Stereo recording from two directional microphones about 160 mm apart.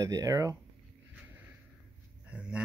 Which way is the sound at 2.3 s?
5° right (ahead or behind).